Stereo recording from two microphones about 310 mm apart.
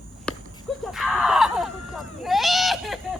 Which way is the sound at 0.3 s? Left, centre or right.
Centre.